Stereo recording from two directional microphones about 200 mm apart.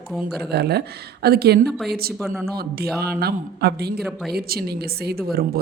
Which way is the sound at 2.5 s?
50° right (ahead or behind).